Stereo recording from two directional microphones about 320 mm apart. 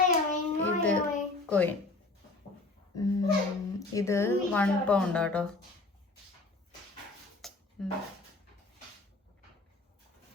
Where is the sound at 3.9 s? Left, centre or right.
Centre.